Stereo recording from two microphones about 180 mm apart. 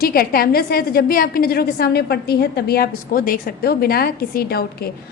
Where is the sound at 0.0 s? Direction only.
55° left (ahead or behind).